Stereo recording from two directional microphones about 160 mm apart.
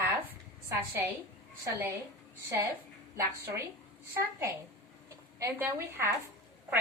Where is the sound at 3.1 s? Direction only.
15° right (ahead or behind).